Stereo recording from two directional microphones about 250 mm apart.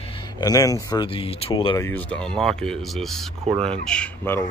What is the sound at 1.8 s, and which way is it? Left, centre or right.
Speech, centre.